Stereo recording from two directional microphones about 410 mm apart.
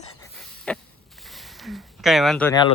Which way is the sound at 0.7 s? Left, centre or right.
Centre.